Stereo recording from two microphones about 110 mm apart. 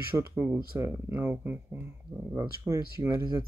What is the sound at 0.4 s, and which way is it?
Speech, 25° right (ahead or behind).